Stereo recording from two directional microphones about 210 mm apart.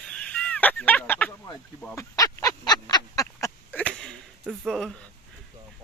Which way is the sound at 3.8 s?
5° left (ahead or behind).